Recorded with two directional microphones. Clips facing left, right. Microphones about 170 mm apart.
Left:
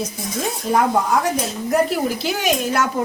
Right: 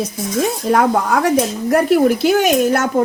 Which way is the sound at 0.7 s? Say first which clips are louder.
Right 1 dB; 70° right (ahead or behind).